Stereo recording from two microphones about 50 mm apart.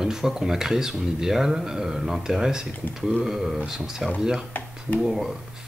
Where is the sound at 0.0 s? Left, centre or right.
Centre.